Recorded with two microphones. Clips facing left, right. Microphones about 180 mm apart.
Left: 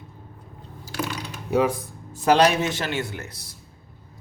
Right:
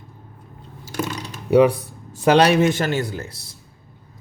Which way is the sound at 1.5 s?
75° right (ahead or behind).